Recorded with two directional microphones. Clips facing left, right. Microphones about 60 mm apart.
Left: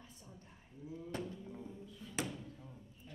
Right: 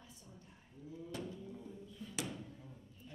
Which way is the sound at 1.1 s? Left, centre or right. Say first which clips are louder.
Left 2 dB; left.